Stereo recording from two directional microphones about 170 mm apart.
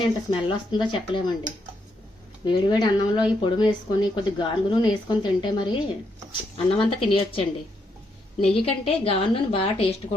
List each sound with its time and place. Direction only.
0.0 s speech: 30° left (ahead or behind)
2.4 s a woman's voice: 25° left (ahead or behind)
8.6 s a woman's voice: 35° left (ahead or behind)